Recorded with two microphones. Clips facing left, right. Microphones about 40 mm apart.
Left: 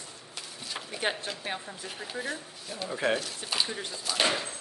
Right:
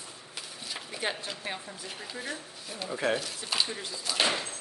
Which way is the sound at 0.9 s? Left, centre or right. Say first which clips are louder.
Left 3 dB; centre.